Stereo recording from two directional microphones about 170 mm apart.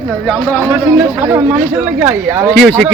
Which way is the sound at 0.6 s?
10° right (ahead or behind).